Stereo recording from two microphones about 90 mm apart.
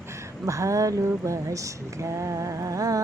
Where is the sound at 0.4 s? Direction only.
35° right (ahead or behind).